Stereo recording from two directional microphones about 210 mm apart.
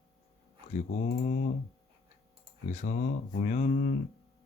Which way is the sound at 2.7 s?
35° left (ahead or behind).